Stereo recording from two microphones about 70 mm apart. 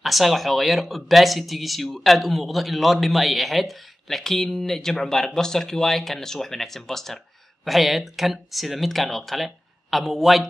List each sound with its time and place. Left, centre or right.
0.0 s speech: centre